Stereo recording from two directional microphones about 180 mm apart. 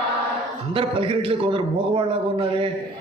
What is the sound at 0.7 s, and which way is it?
A man's voice, 30° right (ahead or behind).